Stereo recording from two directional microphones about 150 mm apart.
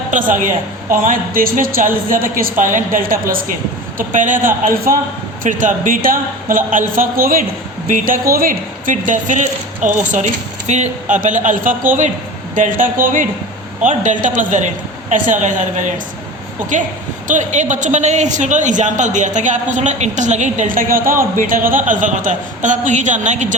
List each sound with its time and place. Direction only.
0.1 s a woman's voice: 60° right (ahead or behind)
3.9 s a man's voice: 60° right (ahead or behind); by 4.9 s 75° right (ahead or behind)
5.4 s a man's voice: 60° right (ahead or behind)